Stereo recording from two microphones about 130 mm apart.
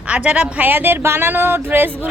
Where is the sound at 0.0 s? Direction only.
10° right (ahead or behind).